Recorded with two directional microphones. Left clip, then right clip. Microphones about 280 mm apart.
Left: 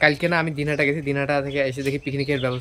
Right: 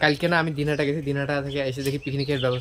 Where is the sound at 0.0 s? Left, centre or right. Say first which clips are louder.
Left 2 dB; centre.